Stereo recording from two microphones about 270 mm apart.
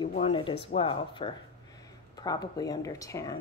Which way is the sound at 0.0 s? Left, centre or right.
Centre.